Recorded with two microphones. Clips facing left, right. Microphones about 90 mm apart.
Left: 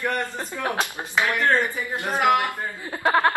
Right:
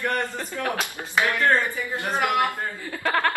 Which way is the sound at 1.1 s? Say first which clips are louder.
Even; 20° left (ahead or behind).